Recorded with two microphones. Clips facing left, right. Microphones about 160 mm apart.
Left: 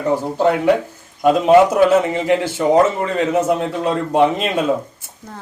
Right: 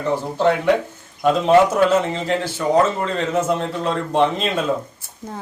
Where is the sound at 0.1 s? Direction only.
5° left (ahead or behind).